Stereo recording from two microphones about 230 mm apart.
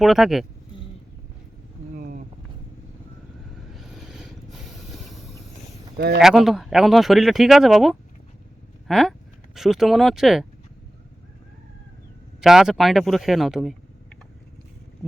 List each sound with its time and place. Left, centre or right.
0.0 s speech: centre
2.0 s vehicle: right
3.8 s vehicle: centre
6.0 s speech: right
6.2 s speech: centre
12.4 s speech: centre